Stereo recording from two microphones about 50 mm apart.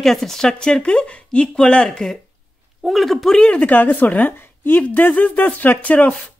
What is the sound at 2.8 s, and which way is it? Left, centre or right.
Speech, centre.